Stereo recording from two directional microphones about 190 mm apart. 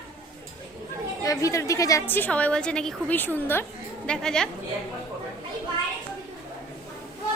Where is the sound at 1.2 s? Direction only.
15° left (ahead or behind).